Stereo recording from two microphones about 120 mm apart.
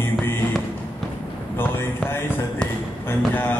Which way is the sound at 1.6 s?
20° left (ahead or behind).